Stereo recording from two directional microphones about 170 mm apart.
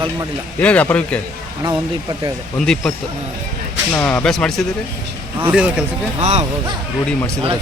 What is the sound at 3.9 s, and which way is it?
Speech, 10° left (ahead or behind).